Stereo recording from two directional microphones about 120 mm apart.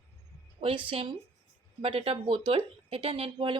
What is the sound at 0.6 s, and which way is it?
Speech, 50° right (ahead or behind).